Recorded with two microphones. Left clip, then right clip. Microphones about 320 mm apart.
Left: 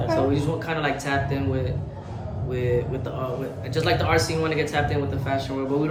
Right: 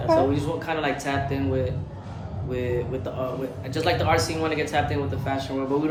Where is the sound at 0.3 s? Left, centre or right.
Centre.